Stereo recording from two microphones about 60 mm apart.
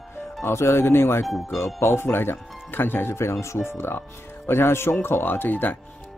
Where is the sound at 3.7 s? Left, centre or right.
Left.